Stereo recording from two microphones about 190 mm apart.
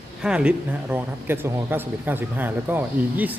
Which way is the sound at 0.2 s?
5° right (ahead or behind).